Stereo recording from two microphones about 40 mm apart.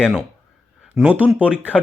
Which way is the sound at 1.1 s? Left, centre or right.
Right.